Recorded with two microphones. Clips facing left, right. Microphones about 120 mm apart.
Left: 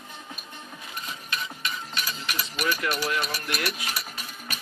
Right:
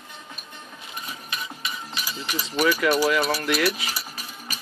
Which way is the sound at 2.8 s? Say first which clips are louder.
Right 7 dB; 90° right.